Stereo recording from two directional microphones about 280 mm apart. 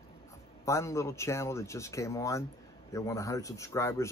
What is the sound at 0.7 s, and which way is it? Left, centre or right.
Speech, centre.